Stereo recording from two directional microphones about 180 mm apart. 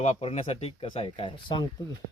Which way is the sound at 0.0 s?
35° left (ahead or behind).